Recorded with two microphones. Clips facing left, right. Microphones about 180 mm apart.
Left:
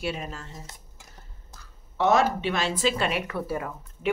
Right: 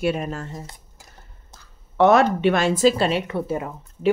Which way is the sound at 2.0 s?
60° right (ahead or behind).